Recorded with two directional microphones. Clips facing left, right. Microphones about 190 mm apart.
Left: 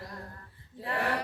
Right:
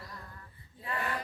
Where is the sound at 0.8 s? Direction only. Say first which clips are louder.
Left 5 dB; 75° left (ahead or behind).